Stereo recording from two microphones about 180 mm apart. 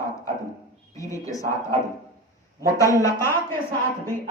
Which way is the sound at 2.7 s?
20° left (ahead or behind).